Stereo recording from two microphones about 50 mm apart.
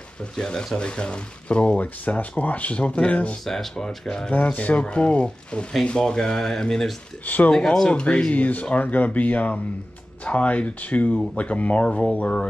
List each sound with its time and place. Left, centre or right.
0.2 s speech: centre
3.4 s speech: centre
4.3 s speech: left; by 7.0 s centre
7.2 s speech: left
7.5 s speech: centre
7.9 s speech: left